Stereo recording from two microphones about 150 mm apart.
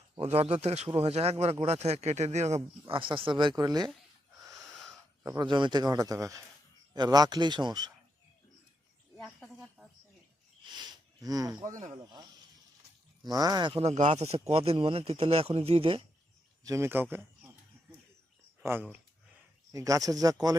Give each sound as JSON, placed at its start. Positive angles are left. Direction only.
{"t": 0.2, "sound": "speech", "side_deg": -45}
{"t": 2.9, "sound": "speech", "side_deg": -35}
{"t": 4.5, "sound": "wheeze", "side_deg": 0}
{"t": 5.4, "sound": "speech", "side_deg": -30}
{"t": 9.1, "sound": "a sound", "side_deg": 0}
{"t": 10.7, "sound": "sniff", "side_deg": -30}
{"t": 11.7, "sound": "speech", "side_deg": -55}
{"t": 13.2, "sound": "speech", "side_deg": -25}
{"t": 13.8, "sound": "speech", "side_deg": -50}
{"t": 16.6, "sound": "a man's voice", "side_deg": -20}
{"t": 18.6, "sound": "speech", "side_deg": -15}